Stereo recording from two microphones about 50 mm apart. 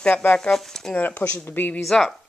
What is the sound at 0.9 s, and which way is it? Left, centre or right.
Speech, left.